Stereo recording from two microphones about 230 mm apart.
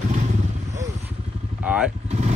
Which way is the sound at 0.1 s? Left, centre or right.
Right.